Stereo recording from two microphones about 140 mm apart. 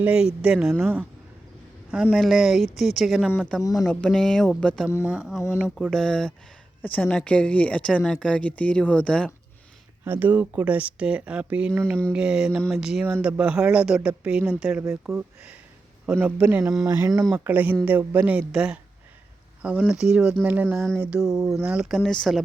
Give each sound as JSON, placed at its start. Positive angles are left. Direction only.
{"t": 0.0, "sound": "speech", "side_deg": -10}
{"t": 5.0, "sound": "speech", "side_deg": -5}
{"t": 10.0, "sound": "speech", "side_deg": -15}
{"t": 17.0, "sound": "speech", "side_deg": -25}
{"t": 17.3, "sound": "speech", "side_deg": -10}
{"t": 19.9, "sound": "speech", "side_deg": -5}
{"t": 20.7, "sound": "speech", "side_deg": 5}
{"t": 21.0, "sound": "speech", "side_deg": -5}